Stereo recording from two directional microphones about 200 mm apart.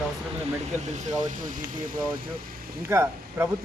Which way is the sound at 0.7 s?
35° right (ahead or behind).